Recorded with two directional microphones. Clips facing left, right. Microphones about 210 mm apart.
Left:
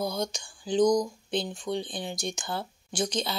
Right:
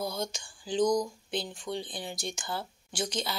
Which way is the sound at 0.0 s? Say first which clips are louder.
Left 4 dB; 15° left (ahead or behind).